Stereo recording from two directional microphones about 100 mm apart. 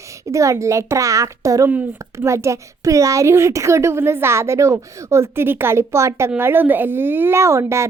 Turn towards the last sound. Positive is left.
turn(degrees=-30)  # may be behind; listen again after turning